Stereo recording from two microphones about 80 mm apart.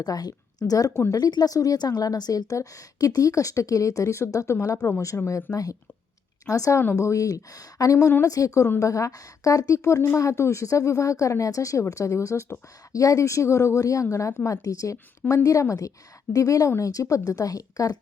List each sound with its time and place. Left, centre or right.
0.0 s a woman's voice: left
6.4 s a woman's voice: left
15.2 s a woman's voice: centre
15.6 s a woman's voice: left